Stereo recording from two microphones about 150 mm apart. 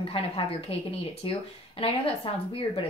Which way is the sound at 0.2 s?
40° left (ahead or behind).